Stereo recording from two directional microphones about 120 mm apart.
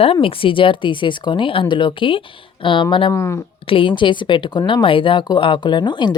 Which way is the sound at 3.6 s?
45° left (ahead or behind).